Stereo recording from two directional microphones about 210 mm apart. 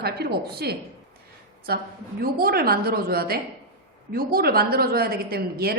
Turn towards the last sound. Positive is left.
turn(degrees=-45)  # may be behind; listen again after turning